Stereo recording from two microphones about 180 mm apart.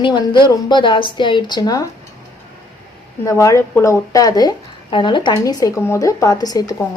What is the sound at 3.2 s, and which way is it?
A woman's voice, 15° left (ahead or behind).